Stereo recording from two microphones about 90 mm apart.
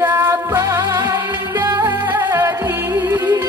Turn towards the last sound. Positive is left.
turn(degrees=-25)  # may be behind; listen again after turning